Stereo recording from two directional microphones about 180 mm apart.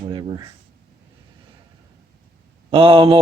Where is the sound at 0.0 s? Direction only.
25° right (ahead or behind).